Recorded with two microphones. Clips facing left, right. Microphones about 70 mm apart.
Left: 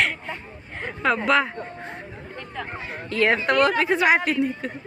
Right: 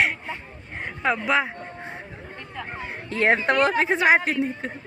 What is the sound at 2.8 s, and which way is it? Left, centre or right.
A woman's voice, right.